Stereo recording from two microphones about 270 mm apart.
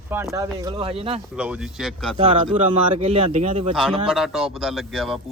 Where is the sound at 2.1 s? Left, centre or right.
Centre.